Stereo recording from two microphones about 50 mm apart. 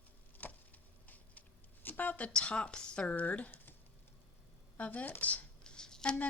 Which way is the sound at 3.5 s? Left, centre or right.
Left.